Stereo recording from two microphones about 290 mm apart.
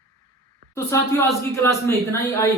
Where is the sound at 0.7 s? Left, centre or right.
Centre.